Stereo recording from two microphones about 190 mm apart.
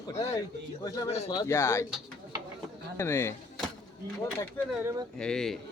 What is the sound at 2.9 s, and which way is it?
Speech, 15° left (ahead or behind).